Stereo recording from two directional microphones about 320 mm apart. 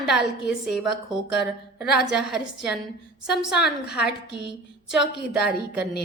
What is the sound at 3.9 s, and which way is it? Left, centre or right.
Speech, left.